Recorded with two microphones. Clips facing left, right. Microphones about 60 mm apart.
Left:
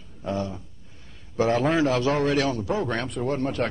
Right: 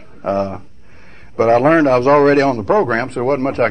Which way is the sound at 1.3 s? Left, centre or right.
Right.